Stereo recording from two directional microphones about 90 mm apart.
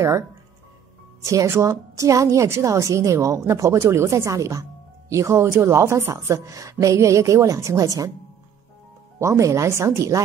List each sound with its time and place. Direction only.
1.2 s a woman's voice: 35° right (ahead or behind)
9.2 s a woman's voice: 35° right (ahead or behind)